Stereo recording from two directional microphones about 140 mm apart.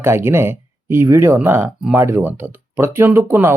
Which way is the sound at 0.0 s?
20° right (ahead or behind).